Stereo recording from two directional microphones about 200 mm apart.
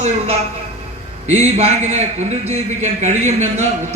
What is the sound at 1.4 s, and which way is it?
Speech, 30° right (ahead or behind).